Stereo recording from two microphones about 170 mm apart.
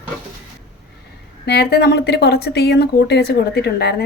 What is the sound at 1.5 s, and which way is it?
Speech, 75° left (ahead or behind).